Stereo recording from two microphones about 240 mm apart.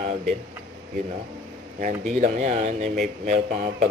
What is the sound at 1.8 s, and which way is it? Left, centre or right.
A man's voice, right.